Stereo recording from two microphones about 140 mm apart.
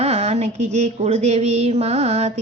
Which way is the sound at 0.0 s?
55° right (ahead or behind).